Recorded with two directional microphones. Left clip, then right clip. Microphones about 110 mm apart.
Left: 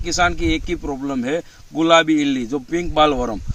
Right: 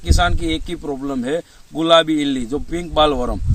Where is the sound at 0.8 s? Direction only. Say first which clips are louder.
Even; 5° left (ahead or behind).